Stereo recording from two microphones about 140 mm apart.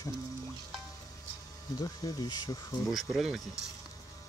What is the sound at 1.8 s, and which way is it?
Speech, 25° left (ahead or behind).